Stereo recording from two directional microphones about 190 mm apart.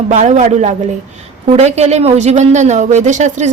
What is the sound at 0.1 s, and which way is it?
Speech, 40° right (ahead or behind).